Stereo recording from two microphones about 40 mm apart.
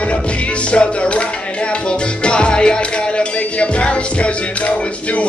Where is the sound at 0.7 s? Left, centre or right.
Left.